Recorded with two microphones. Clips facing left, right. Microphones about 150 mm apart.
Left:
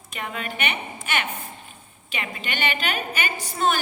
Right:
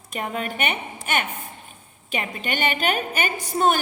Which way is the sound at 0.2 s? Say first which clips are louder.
Right 3 dB; 40° right (ahead or behind).